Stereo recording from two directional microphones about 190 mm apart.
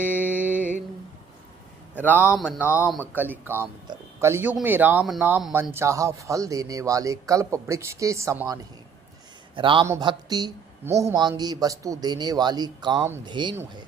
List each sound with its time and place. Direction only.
0.2 s music: 10° right (ahead or behind)
2.0 s speech: 10° right (ahead or behind)
9.6 s speech: 25° right (ahead or behind)